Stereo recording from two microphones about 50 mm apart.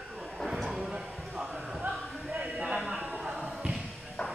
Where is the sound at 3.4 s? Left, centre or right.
Right.